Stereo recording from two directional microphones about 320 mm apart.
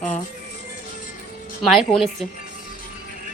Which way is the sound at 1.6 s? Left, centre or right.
Centre.